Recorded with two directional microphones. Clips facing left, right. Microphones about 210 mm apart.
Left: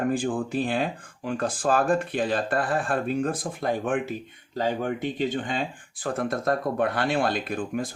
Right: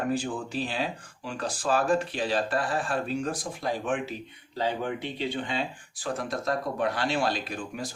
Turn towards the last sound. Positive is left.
turn(degrees=55)  # may be behind; listen again after turning